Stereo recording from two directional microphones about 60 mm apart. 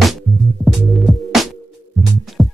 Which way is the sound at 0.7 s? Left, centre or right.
Centre.